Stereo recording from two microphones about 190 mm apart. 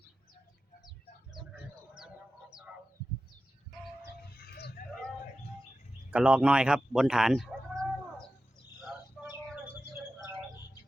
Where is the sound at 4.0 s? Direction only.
55° left (ahead or behind).